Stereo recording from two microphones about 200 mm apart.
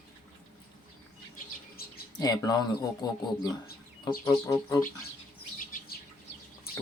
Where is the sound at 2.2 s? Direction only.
20° left (ahead or behind).